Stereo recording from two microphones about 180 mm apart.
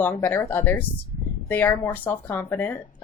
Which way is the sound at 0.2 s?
10° left (ahead or behind).